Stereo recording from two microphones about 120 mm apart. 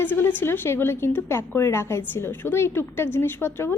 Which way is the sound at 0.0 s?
15° left (ahead or behind).